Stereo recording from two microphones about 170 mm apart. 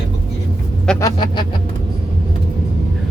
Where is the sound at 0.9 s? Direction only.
25° left (ahead or behind).